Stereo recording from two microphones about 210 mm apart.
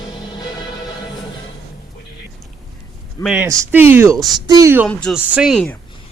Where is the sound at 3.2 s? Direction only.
5° right (ahead or behind).